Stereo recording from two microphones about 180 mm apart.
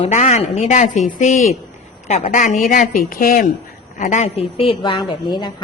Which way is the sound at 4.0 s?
40° left (ahead or behind).